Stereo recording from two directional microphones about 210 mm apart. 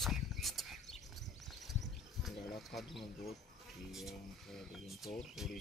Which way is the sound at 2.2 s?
Centre (ahead or behind).